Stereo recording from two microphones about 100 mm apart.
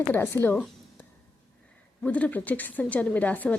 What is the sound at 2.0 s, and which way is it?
A woman's voice, 15° left (ahead or behind).